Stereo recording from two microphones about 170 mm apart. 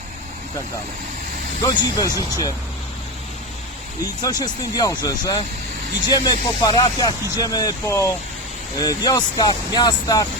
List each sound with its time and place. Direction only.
1.6 s speech: 20° left (ahead or behind)
4.2 s speech: 20° left (ahead or behind)